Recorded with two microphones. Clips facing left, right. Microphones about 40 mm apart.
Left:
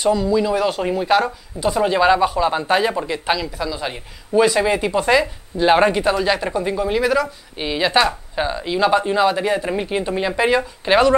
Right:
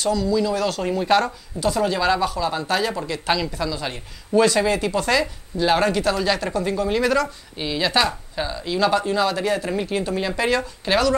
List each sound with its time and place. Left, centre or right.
0.0 s speech: centre
3.3 s speech: centre
7.5 s speech: centre